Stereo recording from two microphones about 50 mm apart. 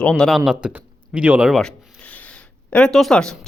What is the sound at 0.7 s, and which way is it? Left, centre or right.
Speech, right.